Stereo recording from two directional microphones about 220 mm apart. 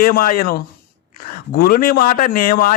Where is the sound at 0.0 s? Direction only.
40° left (ahead or behind).